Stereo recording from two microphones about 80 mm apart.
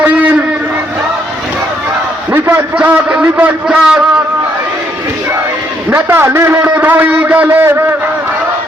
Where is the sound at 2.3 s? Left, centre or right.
Right.